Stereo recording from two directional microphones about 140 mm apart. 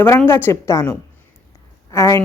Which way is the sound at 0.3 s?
15° left (ahead or behind).